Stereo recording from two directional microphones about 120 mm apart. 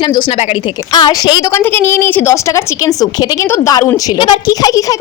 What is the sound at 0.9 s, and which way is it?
Speech, 35° left (ahead or behind).